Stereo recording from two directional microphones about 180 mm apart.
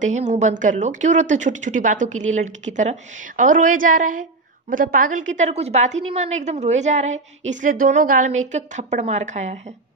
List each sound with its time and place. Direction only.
0.0 s a woman's voice: 40° right (ahead or behind)